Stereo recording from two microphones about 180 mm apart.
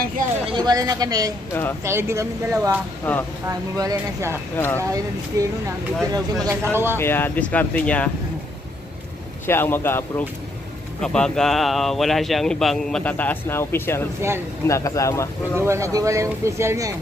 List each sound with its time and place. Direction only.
0.5 s a woman's voice: 25° right (ahead or behind)
1.5 s speech: 15° left (ahead or behind)
1.9 s speech: 15° right (ahead or behind)
3.1 s speech: 5° left (ahead or behind)
3.4 s speech: 20° right (ahead or behind)
4.6 s speech: 10° left (ahead or behind)
5.4 s a woman's voice: 20° right (ahead or behind)
7.0 s speech: 10° left (ahead or behind)
9.5 s speech: 10° left (ahead or behind)
15.5 s speech: 15° right (ahead or behind)